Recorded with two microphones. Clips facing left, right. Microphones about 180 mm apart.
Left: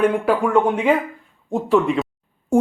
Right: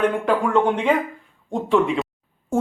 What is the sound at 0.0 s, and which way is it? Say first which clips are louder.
Speech: left 2 dB; 10° left (ahead or behind).